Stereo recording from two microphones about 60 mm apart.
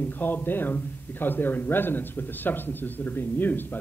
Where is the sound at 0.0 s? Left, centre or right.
Left.